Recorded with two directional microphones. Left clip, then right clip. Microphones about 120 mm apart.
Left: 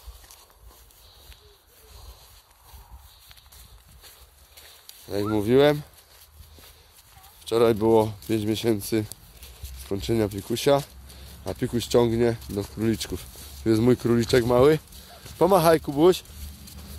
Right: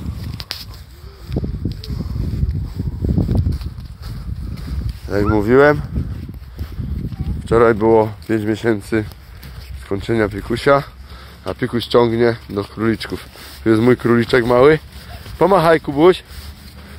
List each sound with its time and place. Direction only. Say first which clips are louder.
5.1 s speech: right 8 dB; 20° left (ahead or behind)
7.4 s speech: right 8 dB; 25° left (ahead or behind)